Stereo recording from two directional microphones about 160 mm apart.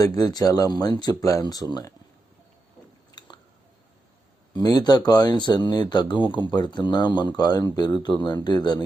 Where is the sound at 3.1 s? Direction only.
25° left (ahead or behind).